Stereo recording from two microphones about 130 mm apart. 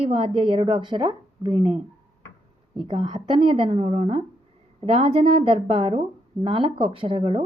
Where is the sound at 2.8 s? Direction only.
35° right (ahead or behind).